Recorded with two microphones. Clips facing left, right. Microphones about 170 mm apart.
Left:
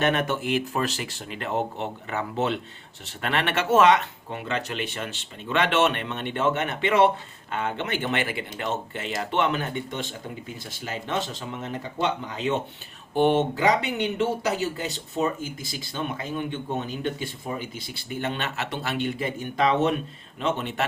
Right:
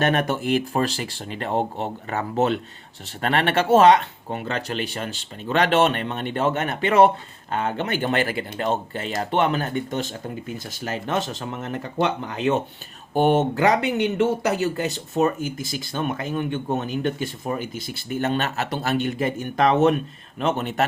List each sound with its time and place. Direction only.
0.0 s speech: 40° right (ahead or behind)
10.8 s speech: 55° right (ahead or behind)
13.1 s speech: 45° right (ahead or behind)